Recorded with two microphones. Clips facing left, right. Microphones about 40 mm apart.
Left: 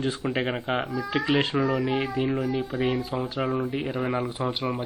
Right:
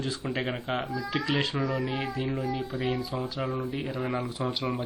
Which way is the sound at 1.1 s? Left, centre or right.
Left.